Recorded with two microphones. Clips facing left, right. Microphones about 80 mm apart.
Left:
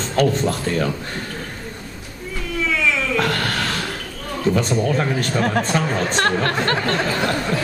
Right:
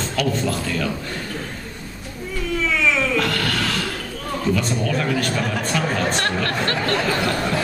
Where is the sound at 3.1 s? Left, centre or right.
Left.